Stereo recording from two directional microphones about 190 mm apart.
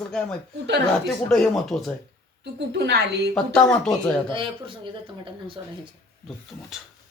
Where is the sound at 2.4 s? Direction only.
60° right (ahead or behind).